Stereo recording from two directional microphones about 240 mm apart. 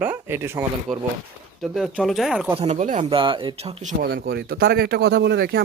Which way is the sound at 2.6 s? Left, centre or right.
Right.